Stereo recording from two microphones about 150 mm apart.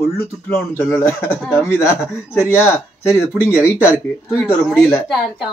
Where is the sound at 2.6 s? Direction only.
15° left (ahead or behind).